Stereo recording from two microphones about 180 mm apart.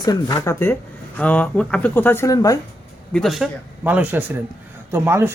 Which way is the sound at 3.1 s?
Centre (ahead or behind).